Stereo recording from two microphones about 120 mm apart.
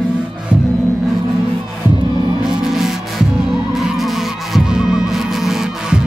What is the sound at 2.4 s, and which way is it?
Music, 5° right (ahead or behind).